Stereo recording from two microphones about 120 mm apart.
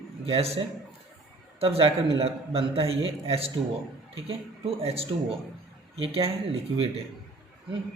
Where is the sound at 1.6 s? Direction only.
50° right (ahead or behind).